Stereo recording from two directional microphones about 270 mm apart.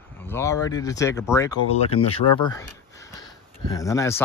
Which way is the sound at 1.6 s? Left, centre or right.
Left.